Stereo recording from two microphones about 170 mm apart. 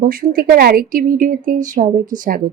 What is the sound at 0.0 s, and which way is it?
Speech, 55° right (ahead or behind).